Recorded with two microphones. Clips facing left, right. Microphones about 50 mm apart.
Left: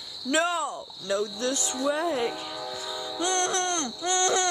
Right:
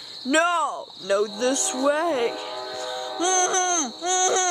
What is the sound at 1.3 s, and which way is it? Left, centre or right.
Speech, right.